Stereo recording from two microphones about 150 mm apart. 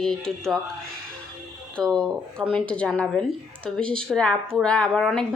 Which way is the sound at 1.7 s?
5° left (ahead or behind).